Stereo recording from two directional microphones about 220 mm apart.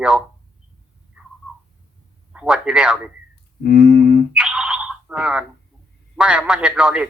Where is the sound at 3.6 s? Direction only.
45° left (ahead or behind).